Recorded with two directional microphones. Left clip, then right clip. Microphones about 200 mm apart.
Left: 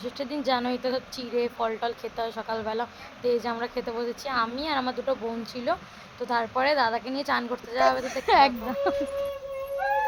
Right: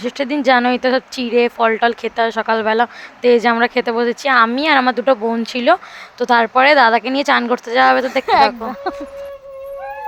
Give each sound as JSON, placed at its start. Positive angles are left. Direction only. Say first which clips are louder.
{"t": 0.0, "sound": "speech", "louder": "right 13 dB", "side_deg": -30}